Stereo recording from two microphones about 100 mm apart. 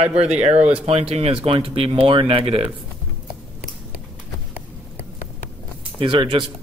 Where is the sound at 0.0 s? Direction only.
90° right; by 2.7 s 70° right (ahead or behind).